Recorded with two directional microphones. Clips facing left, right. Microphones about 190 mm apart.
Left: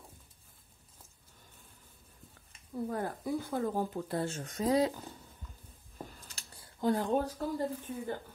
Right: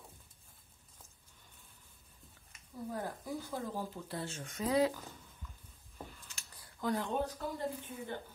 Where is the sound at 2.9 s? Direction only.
55° left (ahead or behind); by 5.1 s 35° left (ahead or behind).